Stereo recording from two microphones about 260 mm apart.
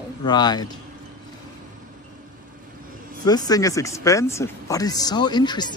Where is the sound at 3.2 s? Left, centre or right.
Centre.